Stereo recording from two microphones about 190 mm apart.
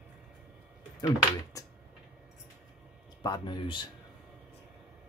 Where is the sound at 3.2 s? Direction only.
20° left (ahead or behind).